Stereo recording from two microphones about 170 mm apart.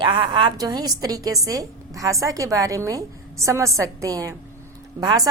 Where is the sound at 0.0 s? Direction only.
25° right (ahead or behind).